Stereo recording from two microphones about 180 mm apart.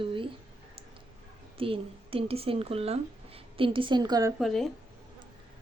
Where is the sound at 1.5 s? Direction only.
30° right (ahead or behind).